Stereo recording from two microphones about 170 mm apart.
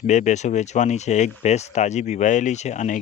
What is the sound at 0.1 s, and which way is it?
Speech, 45° left (ahead or behind).